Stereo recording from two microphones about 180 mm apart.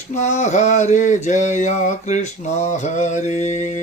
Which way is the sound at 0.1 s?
40° left (ahead or behind).